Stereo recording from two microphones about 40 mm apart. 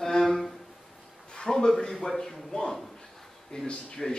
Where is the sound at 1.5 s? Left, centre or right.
Centre.